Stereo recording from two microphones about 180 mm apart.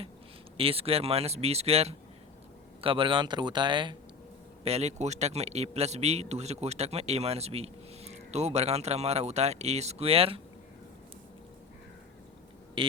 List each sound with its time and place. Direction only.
0.5 s a man's voice: 30° right (ahead or behind)
4.6 s a man's voice: 35° right (ahead or behind)
12.8 s speech: 30° right (ahead or behind)